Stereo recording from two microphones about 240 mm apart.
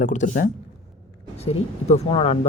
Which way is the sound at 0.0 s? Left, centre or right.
Left.